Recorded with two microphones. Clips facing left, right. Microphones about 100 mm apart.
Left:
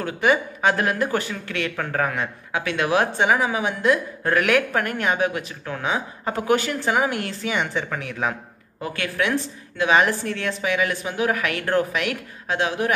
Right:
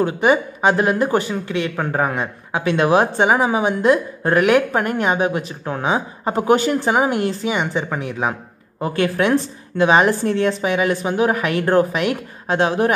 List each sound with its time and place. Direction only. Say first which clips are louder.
0.0 s speech: right 5 dB; 25° right (ahead or behind)
8.7 s speech: right 7 dB; 35° right (ahead or behind)